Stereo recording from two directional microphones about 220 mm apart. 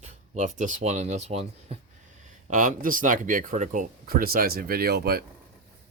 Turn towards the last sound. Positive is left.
turn(degrees=-45)  # may be behind; listen again after turning